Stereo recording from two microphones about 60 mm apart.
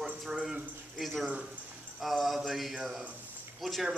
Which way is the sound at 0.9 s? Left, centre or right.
Centre.